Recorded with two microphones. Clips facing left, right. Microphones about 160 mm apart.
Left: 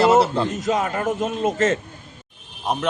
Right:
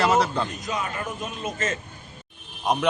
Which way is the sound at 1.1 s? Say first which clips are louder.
Left 10 dB; 75° left (ahead or behind).